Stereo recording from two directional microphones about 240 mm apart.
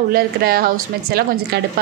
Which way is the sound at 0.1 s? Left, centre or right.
Right.